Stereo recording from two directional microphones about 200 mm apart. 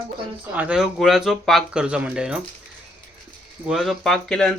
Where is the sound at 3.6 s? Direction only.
Centre (ahead or behind).